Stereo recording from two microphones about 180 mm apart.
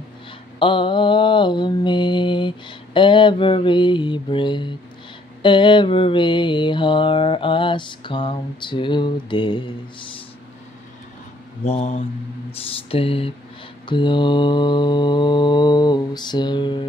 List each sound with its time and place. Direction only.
0.6 s mantra: 25° left (ahead or behind)
11.6 s speech: 35° left (ahead or behind)
13.8 s mantra: 25° left (ahead or behind)